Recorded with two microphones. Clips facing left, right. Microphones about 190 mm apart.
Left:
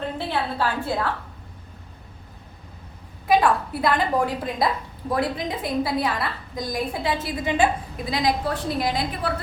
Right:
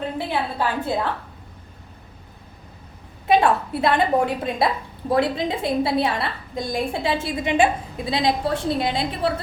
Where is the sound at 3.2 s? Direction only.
25° right (ahead or behind).